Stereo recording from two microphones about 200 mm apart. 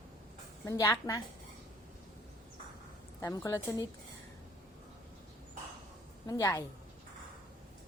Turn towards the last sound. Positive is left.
turn(degrees=15)  # may be behind; listen again after turning